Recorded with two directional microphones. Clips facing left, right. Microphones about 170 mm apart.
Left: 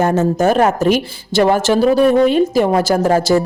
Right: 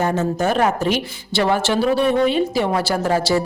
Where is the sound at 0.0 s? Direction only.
45° left (ahead or behind).